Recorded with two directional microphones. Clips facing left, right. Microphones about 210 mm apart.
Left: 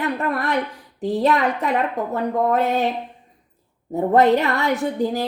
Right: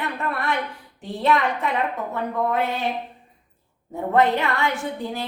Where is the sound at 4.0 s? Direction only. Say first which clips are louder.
Left 4 dB; 40° left (ahead or behind).